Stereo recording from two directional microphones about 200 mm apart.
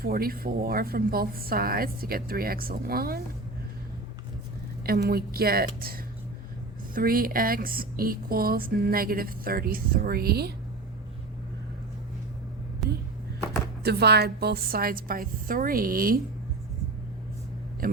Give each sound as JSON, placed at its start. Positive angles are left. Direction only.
{"t": 0.0, "sound": "speech", "side_deg": -50}
{"t": 4.9, "sound": "speech", "side_deg": -50}
{"t": 12.8, "sound": "a sound", "side_deg": 0}
{"t": 13.8, "sound": "speech", "side_deg": -55}
{"t": 17.8, "sound": "speech", "side_deg": -50}